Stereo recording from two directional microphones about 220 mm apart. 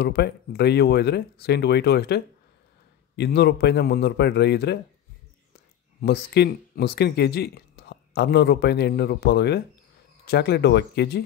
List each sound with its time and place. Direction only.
0.0 s speech: 50° left (ahead or behind)
5.9 s speech: 50° left (ahead or behind)